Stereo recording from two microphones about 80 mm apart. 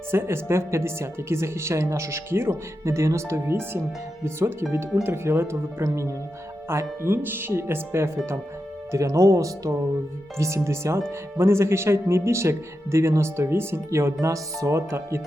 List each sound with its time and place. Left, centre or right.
0.1 s speech: right